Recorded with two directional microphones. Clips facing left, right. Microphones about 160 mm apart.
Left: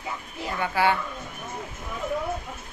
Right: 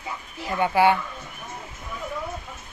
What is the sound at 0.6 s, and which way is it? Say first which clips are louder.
Speech: right 5 dB; 15° right (ahead or behind).